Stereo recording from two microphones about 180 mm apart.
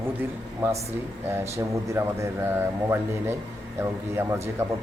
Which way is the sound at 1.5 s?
15° right (ahead or behind).